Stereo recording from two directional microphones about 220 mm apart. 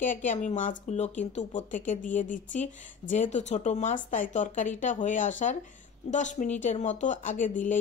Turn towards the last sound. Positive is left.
turn(degrees=35)  # may be behind; listen again after turning